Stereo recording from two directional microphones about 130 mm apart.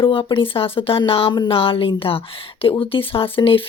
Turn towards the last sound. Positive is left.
turn(degrees=45)  # may be behind; listen again after turning